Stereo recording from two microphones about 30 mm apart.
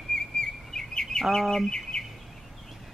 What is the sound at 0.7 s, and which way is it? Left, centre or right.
Chirp, centre.